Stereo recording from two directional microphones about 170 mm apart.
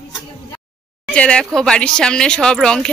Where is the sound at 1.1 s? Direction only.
5° left (ahead or behind).